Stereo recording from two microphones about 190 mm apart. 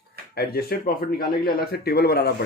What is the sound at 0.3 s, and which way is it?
Speech, 55° left (ahead or behind).